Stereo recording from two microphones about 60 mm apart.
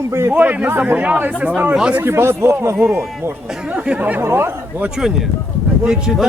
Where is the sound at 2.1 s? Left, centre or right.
Right.